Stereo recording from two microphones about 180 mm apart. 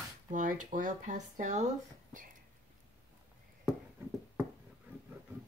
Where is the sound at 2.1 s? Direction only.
50° right (ahead or behind).